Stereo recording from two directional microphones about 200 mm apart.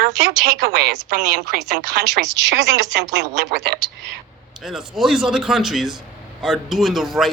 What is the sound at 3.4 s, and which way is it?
Speech, 55° right (ahead or behind).